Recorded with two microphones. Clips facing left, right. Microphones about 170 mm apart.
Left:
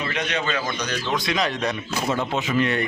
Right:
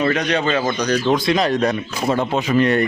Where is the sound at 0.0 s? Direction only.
40° right (ahead or behind).